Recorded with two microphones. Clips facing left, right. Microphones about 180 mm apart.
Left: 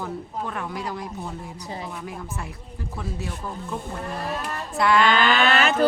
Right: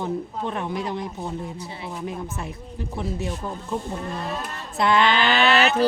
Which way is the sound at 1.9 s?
25° right (ahead or behind).